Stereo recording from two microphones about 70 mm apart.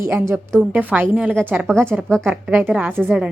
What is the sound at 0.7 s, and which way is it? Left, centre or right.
Speech, right.